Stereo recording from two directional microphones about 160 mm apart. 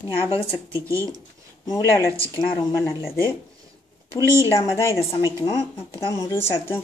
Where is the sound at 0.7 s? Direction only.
20° right (ahead or behind).